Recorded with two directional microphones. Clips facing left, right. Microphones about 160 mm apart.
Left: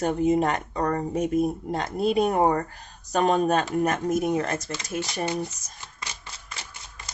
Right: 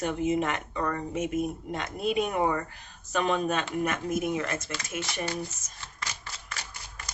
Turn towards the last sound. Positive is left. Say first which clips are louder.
# even
turn(degrees=20)  # may be behind; listen again after turning